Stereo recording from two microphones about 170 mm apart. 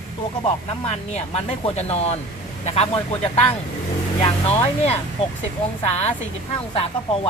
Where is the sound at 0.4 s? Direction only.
40° left (ahead or behind).